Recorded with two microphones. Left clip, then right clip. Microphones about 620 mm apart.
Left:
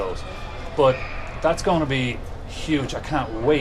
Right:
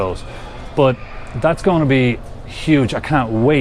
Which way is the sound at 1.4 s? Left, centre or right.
Right.